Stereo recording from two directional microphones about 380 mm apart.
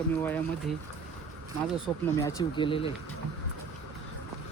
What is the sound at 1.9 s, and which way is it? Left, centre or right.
Speech, centre.